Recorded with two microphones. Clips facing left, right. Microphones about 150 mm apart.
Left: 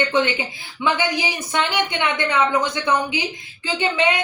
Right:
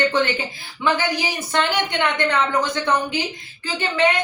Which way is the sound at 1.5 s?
15° left (ahead or behind).